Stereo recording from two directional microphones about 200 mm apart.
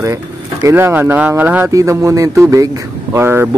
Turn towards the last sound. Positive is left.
turn(degrees=-10)  # may be behind; listen again after turning